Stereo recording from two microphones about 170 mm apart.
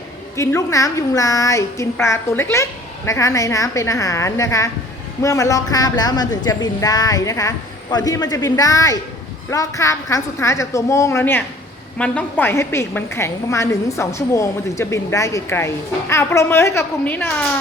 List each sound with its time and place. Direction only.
0.3 s a woman's voice: 15° left (ahead or behind)